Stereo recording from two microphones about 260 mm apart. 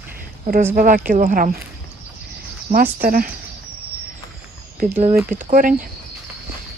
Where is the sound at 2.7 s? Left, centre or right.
Right.